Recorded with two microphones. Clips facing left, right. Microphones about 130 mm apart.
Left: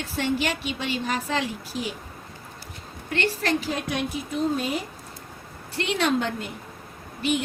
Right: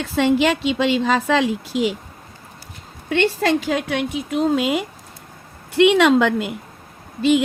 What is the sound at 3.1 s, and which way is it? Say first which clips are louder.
A woman's voice: right 7 dB; 90° right.